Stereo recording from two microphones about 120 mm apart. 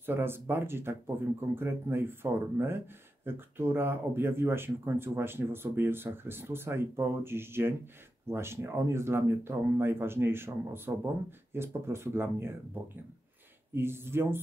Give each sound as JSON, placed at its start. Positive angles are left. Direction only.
{"t": 0.0, "sound": "speech", "side_deg": -20}